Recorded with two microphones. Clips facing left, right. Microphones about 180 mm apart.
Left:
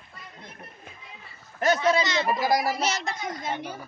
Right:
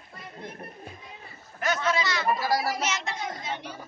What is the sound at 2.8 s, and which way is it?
Speech, 40° left (ahead or behind).